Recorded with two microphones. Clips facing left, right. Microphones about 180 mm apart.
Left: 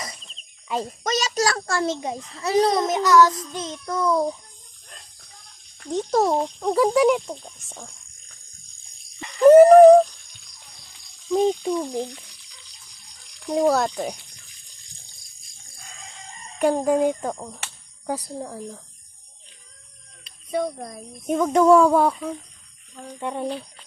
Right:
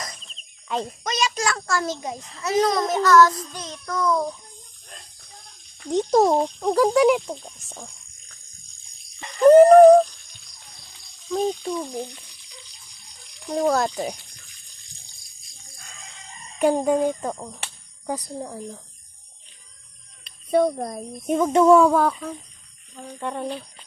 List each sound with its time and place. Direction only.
0.0 s cricket: 5° left (ahead or behind)
1.0 s a child's voice: 40° left (ahead or behind)
2.8 s a child's voice: 15° left (ahead or behind)
5.9 s speech: 15° right (ahead or behind)
6.6 s speech: centre (ahead or behind)
9.4 s a sound: 5° left (ahead or behind)
11.3 s speech: 10° left (ahead or behind)
13.5 s speech: 10° left (ahead or behind)
16.6 s speech: centre (ahead or behind)
17.0 s speech: 15° left (ahead or behind)
17.2 s speech: centre (ahead or behind)
20.5 s a child's voice: 45° right (ahead or behind)
21.2 s speech: 5° right (ahead or behind)
23.2 s speech: 10° left (ahead or behind)